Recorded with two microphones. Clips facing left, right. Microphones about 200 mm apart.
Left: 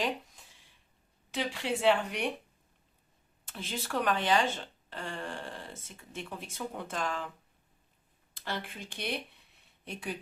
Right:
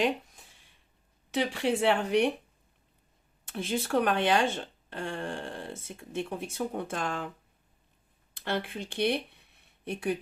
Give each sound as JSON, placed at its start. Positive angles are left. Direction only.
{"t": 1.3, "sound": "speech", "side_deg": -60}
{"t": 3.5, "sound": "speech", "side_deg": -55}
{"t": 8.4, "sound": "speech", "side_deg": -60}